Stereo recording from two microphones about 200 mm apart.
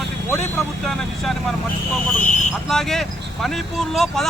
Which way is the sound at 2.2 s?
40° left (ahead or behind).